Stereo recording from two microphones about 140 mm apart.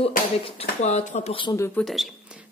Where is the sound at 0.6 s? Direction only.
55° left (ahead or behind).